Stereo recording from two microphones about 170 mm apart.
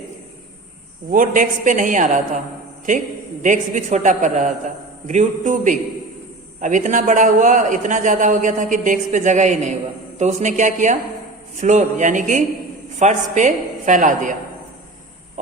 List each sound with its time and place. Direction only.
1.1 s a man's voice: 50° right (ahead or behind)
3.4 s a man's voice: 50° right (ahead or behind)